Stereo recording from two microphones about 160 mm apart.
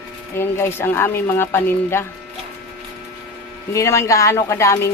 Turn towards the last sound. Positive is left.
turn(degrees=20)  # may be behind; listen again after turning